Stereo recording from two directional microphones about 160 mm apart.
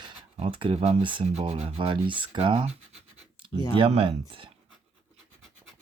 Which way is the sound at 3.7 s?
35° right (ahead or behind).